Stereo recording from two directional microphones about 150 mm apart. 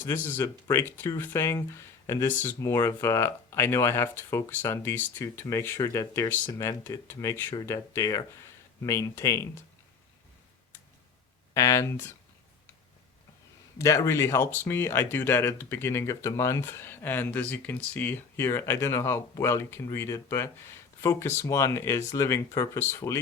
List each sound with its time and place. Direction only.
0.0 s speech: 15° left (ahead or behind)
11.5 s speech: 20° left (ahead or behind)
13.7 s speech: 20° left (ahead or behind)